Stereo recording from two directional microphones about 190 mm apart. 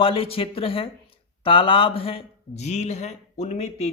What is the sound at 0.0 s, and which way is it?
Speech, 30° left (ahead or behind).